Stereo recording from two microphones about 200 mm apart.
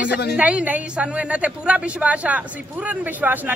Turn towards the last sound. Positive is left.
turn(degrees=-10)  # may be behind; listen again after turning